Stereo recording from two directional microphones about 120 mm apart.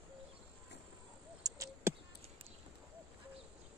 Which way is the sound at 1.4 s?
25° right (ahead or behind).